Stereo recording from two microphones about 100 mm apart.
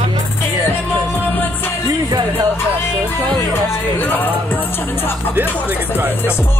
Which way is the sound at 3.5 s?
20° left (ahead or behind).